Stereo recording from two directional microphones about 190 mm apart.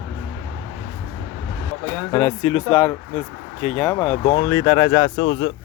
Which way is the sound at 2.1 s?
10° left (ahead or behind).